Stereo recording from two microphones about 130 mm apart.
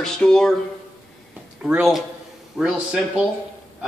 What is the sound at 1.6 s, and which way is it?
Speech, 5° right (ahead or behind).